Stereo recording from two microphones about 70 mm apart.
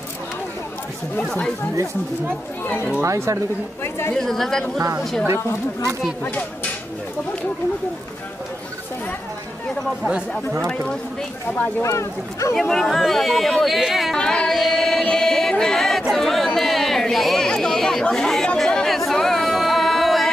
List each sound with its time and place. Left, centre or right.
2.6 s speech: left
3.0 s speech: right
4.1 s speech: centre
11.8 s speech: left
12.5 s speech: centre
14.1 s music: centre
16.1 s chatter: centre